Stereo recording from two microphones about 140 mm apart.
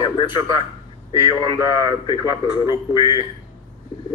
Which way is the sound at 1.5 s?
35° left (ahead or behind).